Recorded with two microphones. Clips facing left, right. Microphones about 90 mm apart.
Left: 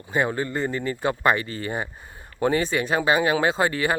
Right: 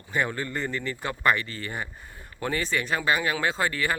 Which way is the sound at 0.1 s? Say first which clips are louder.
Left 4 dB; 20° left (ahead or behind).